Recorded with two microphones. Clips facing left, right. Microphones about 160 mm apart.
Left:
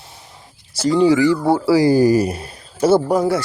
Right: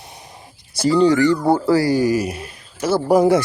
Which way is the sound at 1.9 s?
35° left (ahead or behind).